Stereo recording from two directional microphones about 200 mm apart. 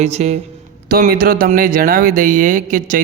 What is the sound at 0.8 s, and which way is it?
Speech, 50° right (ahead or behind).